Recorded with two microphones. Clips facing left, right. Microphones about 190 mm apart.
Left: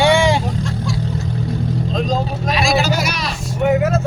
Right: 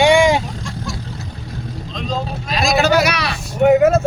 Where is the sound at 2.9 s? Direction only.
65° right (ahead or behind); by 4.1 s 50° right (ahead or behind).